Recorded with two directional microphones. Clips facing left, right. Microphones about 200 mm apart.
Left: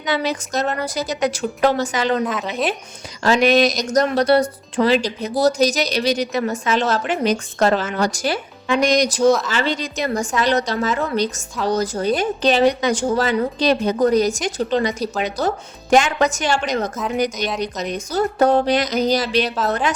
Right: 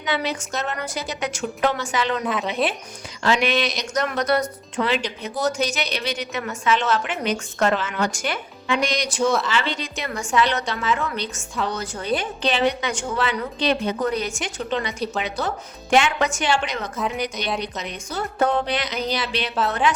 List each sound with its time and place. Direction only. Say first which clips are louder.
0.0 s speech: left 4 dB; 40° left (ahead or behind)
2.2 s speech: left 1 dB; centre (ahead or behind)
3.2 s a woman's voice: left 6 dB; 40° left (ahead or behind)